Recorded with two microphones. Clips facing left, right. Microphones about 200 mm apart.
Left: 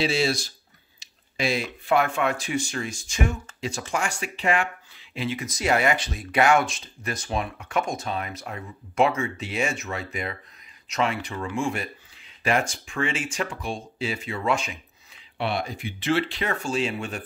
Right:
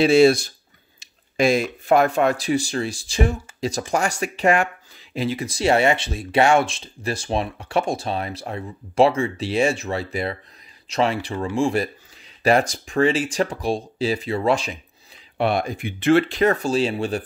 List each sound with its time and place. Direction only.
0.0 s speech: 55° right (ahead or behind); by 14.8 s 35° right (ahead or behind)
15.3 s speech: 50° right (ahead or behind); by 17.2 s 35° right (ahead or behind)